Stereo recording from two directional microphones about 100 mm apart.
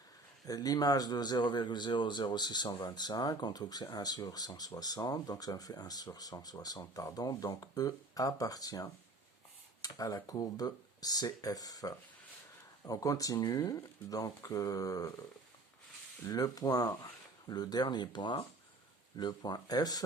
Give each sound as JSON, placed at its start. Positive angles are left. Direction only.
{"t": 0.4, "sound": "a man's voice", "side_deg": 40}
{"t": 16.2, "sound": "a man's voice", "side_deg": 35}